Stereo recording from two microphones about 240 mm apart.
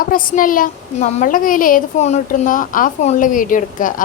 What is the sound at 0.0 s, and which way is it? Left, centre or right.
A woman's voice, left.